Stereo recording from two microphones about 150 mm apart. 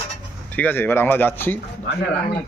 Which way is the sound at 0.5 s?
10° left (ahead or behind).